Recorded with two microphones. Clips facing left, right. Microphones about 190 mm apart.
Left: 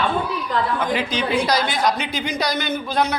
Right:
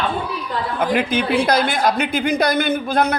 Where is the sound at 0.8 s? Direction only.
55° right (ahead or behind).